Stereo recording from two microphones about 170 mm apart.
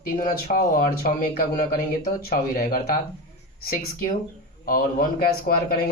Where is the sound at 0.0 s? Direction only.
60° left (ahead or behind).